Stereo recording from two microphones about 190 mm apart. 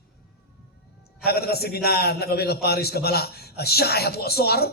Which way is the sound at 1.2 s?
55° left (ahead or behind).